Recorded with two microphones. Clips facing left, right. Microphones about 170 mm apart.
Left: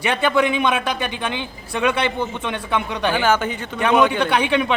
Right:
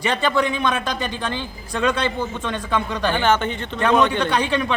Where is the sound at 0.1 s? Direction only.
10° left (ahead or behind).